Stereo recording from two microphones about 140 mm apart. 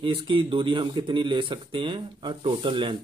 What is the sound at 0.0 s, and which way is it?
Speech, 35° right (ahead or behind).